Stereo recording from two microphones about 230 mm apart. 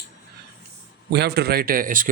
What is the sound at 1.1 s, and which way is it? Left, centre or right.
Speech, right.